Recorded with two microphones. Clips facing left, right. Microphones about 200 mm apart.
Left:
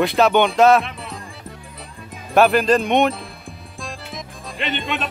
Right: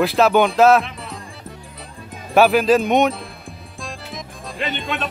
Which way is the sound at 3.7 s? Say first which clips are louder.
Even; centre (ahead or behind).